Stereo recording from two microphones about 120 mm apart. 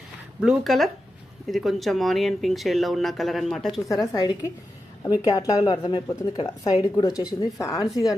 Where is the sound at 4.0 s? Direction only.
35° left (ahead or behind).